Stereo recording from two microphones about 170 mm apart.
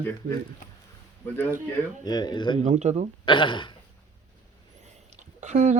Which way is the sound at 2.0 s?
25° left (ahead or behind).